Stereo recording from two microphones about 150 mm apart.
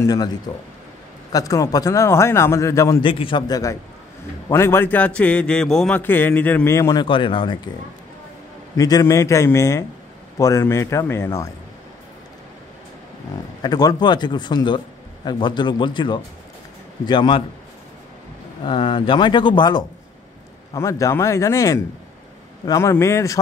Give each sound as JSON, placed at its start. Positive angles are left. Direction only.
{"t": 0.0, "sound": "speech", "side_deg": 25}
{"t": 1.3, "sound": "speech", "side_deg": 25}
{"t": 3.0, "sound": "a man's voice", "side_deg": 35}
{"t": 8.7, "sound": "speech", "side_deg": 25}
{"t": 13.6, "sound": "speech", "side_deg": 25}
{"t": 18.6, "sound": "speech", "side_deg": 35}
{"t": 20.7, "sound": "speech", "side_deg": 20}